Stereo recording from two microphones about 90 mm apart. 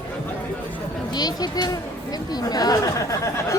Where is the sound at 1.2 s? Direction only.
50° left (ahead or behind).